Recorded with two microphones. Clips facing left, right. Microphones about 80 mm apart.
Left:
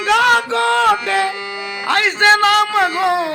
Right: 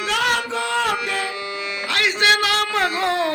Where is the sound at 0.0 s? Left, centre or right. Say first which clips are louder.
Left 8 dB; left.